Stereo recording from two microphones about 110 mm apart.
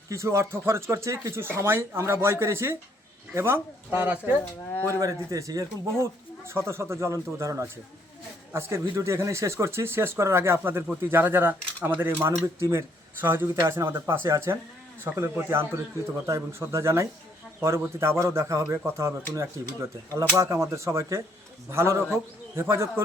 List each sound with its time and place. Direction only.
0.1 s speech: 25° right (ahead or behind)
4.9 s speech: 30° right (ahead or behind)